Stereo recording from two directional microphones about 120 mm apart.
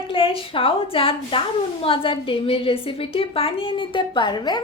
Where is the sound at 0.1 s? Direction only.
50° left (ahead or behind).